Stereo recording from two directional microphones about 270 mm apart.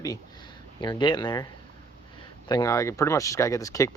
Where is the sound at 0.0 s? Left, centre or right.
Centre.